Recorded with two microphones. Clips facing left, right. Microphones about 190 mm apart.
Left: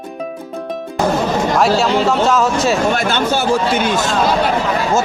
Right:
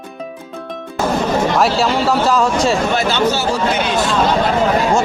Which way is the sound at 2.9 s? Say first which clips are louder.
Right 1 dB; 50° left (ahead or behind).